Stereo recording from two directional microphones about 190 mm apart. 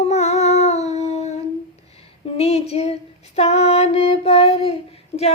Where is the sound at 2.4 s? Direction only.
30° left (ahead or behind).